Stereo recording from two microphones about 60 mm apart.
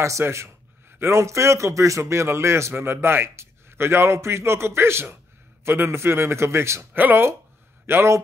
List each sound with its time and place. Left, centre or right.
0.2 s speech: right
6.9 s speech: right